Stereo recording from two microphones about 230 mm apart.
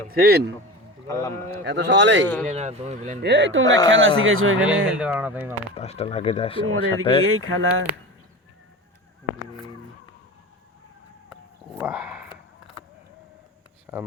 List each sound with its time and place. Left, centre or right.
0.1 s speech: right
1.0 s speech: centre
1.6 s speech: right
2.5 s speech: right
3.2 s speech: right
3.7 s speech: centre
4.3 s speech: right
4.9 s speech: centre
5.7 s speech: left
7.3 s speech: right
11.3 s a sound: centre
13.9 s speech: centre